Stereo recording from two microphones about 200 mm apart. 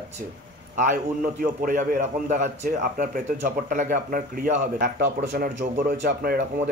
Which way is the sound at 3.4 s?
40° right (ahead or behind).